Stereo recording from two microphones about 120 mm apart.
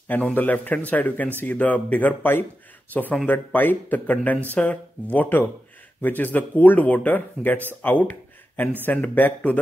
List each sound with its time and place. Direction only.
0.1 s speech: 15° left (ahead or behind)
7.8 s a sound: 15° left (ahead or behind)
8.8 s speech: 10° left (ahead or behind)